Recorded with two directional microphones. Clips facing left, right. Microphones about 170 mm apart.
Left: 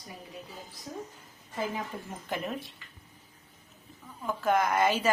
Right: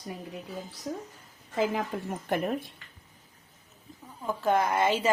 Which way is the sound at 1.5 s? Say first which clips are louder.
Right 6 dB; 90° right.